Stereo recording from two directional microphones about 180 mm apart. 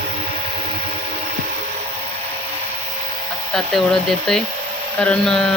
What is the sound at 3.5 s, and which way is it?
Speech, centre (ahead or behind).